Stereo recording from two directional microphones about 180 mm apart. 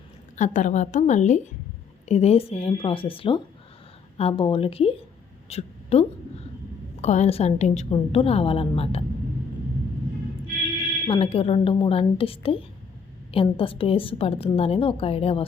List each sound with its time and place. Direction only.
0.3 s a woman's voice: 40° left (ahead or behind)
5.5 s a sound: 35° left (ahead or behind)
7.0 s a woman's voice: 40° left (ahead or behind)
11.1 s a woman's voice: 30° left (ahead or behind)